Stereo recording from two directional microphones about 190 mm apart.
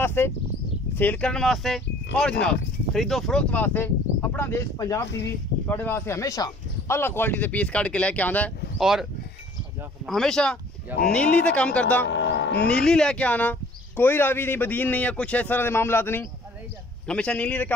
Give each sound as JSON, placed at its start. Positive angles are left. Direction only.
{"t": 0.0, "sound": "speech", "side_deg": 10}
{"t": 10.0, "sound": "speech", "side_deg": 0}
{"t": 12.1, "sound": "a sound", "side_deg": 65}
{"t": 12.7, "sound": "speech", "side_deg": 5}